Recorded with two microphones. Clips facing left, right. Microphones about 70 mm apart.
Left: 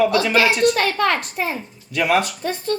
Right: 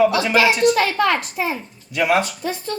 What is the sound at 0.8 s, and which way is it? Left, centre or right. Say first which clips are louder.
Speech: right 1 dB; left.